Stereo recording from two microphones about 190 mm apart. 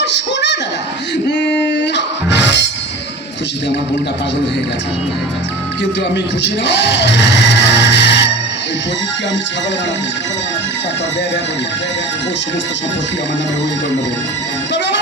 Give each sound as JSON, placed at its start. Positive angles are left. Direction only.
{"t": 0.0, "sound": "a sound", "side_deg": 65}
{"t": 1.3, "sound": "music", "side_deg": 70}
{"t": 6.4, "sound": "speech", "side_deg": 70}